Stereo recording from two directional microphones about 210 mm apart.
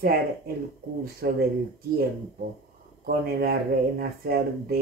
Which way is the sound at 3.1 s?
45° right (ahead or behind).